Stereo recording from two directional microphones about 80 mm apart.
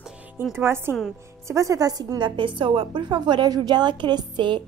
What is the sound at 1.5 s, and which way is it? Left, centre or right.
A woman's voice, right.